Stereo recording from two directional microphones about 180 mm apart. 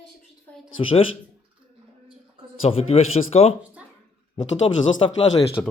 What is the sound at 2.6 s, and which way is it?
Speech, 35° left (ahead or behind).